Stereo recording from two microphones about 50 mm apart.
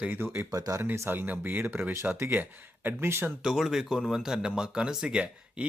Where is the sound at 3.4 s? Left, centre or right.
Centre.